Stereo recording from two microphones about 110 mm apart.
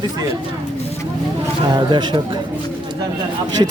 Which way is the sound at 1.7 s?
45° right (ahead or behind).